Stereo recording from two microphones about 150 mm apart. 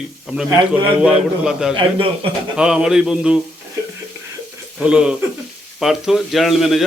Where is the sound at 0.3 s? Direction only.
5° right (ahead or behind).